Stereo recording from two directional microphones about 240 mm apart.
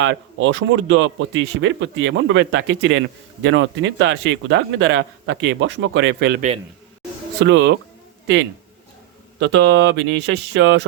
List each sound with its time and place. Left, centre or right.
0.0 s speech: right
9.4 s speech: right